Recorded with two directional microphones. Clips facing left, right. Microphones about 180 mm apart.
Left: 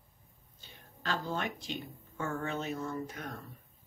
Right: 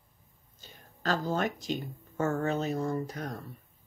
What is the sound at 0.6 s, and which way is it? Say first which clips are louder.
Speech: right 6 dB; 40° right (ahead or behind).